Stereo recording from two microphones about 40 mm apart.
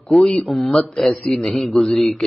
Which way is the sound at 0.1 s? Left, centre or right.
Centre.